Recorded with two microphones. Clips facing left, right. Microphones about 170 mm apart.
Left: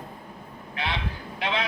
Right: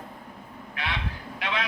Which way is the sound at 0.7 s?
30° left (ahead or behind).